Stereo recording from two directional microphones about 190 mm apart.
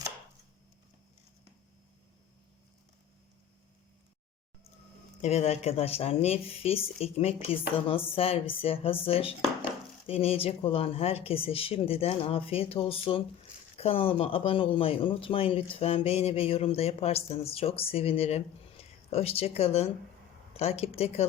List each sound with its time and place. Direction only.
5.2 s speech: 35° left (ahead or behind)